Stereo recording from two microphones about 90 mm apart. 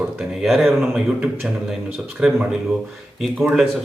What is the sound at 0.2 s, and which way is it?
Speech, centre (ahead or behind).